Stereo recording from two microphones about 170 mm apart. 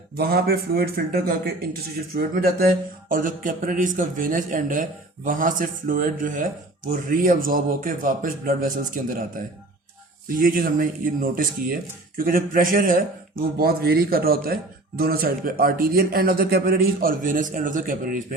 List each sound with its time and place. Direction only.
0.2 s a man's voice: 65° right (ahead or behind)